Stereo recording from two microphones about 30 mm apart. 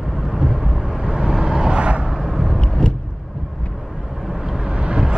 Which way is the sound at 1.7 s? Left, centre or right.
Right.